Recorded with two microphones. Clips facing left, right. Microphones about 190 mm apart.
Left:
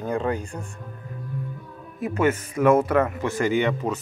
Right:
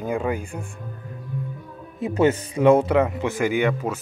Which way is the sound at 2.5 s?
15° right (ahead or behind).